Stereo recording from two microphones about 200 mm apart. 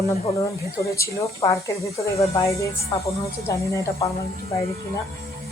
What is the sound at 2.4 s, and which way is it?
Speech, 15° left (ahead or behind).